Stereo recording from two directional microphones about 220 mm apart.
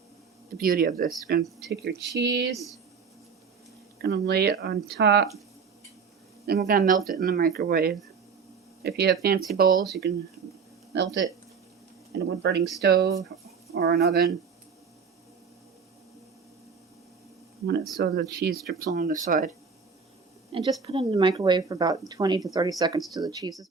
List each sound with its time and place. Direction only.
0.5 s speech: 40° right (ahead or behind)
3.9 s speech: 45° right (ahead or behind)
6.4 s speech: 45° right (ahead or behind)
17.9 s speech: 45° right (ahead or behind)
20.5 s speech: 25° right (ahead or behind)